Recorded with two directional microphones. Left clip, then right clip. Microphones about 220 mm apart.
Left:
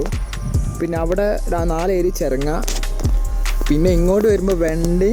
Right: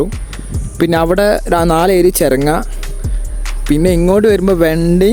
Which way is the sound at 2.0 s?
70° right (ahead or behind).